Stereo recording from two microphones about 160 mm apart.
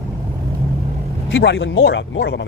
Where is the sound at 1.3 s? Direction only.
90° left.